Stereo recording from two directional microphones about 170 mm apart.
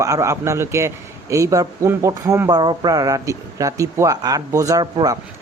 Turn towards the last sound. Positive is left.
turn(degrees=-20)  # may be behind; listen again after turning